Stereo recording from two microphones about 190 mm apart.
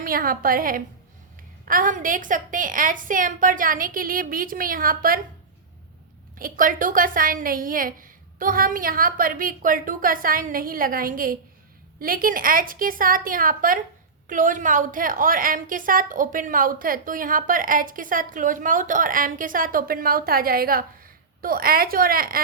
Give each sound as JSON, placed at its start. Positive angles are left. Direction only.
{"t": 0.0, "sound": "a woman's voice", "side_deg": -50}
{"t": 6.4, "sound": "a woman's voice", "side_deg": -45}